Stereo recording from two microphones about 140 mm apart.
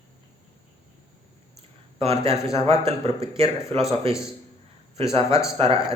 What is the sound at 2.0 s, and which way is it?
Speech, 45° right (ahead or behind).